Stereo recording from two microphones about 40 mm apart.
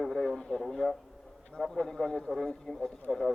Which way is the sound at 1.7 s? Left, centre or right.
Centre.